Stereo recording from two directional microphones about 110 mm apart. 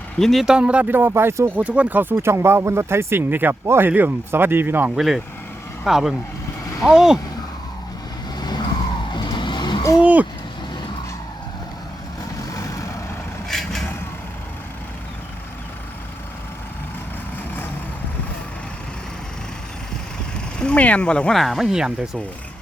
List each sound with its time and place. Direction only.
0.2 s speech: centre (ahead or behind); by 1.5 s 25° right (ahead or behind)
1.5 s speech: 10° right (ahead or behind)
4.9 s speech: centre (ahead or behind)
8.4 s vehicle: 40° left (ahead or behind)
10.0 s speech: 15° right (ahead or behind)
12.4 s vehicle: 30° left (ahead or behind)
13.5 s vehicle: 5° left (ahead or behind)
20.6 s speech: 10° left (ahead or behind); by 22.2 s 5° right (ahead or behind)